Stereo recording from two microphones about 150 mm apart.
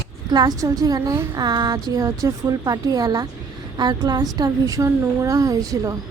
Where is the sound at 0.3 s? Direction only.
25° right (ahead or behind).